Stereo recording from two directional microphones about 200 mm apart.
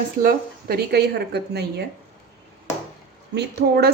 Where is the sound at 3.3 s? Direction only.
55° right (ahead or behind).